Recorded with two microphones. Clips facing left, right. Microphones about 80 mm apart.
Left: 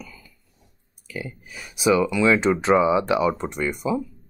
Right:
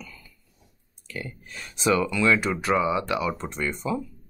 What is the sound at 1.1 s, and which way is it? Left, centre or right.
Speech, centre.